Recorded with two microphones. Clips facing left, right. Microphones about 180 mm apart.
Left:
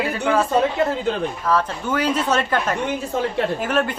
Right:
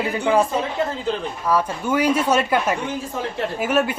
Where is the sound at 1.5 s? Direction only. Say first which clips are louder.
Right 2 dB; 10° right (ahead or behind).